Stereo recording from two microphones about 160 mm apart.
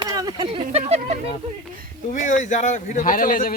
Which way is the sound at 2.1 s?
50° left (ahead or behind).